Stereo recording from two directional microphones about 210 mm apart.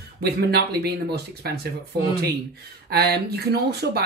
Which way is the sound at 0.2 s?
50° right (ahead or behind).